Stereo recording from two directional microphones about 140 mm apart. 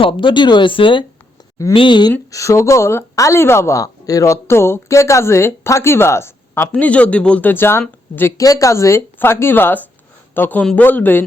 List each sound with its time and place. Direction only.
0.0 s speech: 35° left (ahead or behind)
2.3 s a woman's voice: 20° left (ahead or behind)